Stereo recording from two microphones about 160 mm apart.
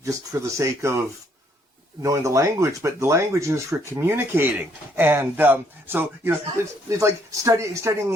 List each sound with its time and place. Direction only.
0.0 s speech: 20° right (ahead or behind)